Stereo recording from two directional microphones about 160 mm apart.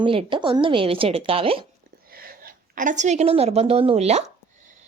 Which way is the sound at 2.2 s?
65° right (ahead or behind).